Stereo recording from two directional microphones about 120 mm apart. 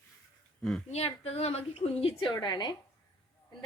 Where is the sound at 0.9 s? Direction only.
60° left (ahead or behind).